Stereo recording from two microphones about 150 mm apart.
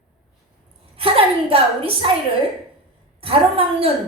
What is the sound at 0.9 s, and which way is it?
A woman's voice, 40° right (ahead or behind).